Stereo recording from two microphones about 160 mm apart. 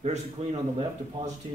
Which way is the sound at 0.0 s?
40° right (ahead or behind).